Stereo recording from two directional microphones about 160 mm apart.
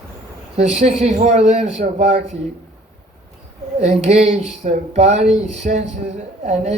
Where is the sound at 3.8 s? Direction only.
45° right (ahead or behind).